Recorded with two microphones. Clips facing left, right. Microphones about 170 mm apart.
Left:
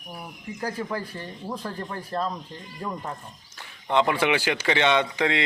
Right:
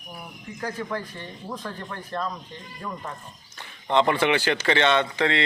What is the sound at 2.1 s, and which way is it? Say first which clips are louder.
Speech: left 2 dB; 35° left (ahead or behind).